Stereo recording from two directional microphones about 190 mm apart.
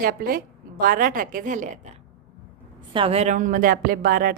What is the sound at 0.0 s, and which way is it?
Speech, 50° right (ahead or behind).